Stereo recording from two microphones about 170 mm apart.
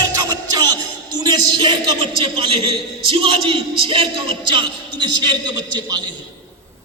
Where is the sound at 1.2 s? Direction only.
25° right (ahead or behind).